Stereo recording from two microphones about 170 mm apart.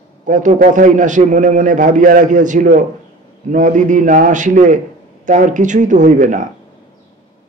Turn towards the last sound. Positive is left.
turn(degrees=-50)  # may be behind; listen again after turning